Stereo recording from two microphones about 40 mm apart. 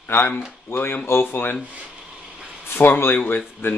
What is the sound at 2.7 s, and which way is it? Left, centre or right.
Speech, left.